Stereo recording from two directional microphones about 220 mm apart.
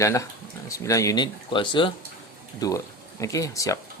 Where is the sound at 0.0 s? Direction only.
15° left (ahead or behind).